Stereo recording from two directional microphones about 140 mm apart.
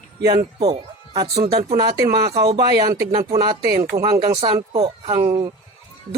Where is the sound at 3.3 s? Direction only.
30° right (ahead or behind).